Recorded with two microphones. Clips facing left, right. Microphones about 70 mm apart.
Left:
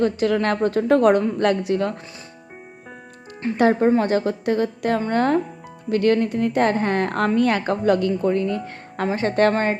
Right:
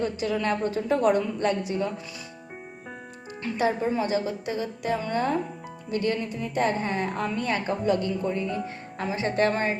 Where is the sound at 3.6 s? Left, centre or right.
Left.